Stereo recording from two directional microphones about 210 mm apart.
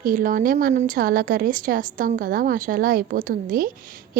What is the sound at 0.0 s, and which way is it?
A woman's voice, 40° right (ahead or behind).